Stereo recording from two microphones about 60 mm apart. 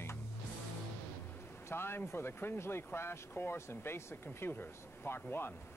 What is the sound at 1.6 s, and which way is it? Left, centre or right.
Speech, left.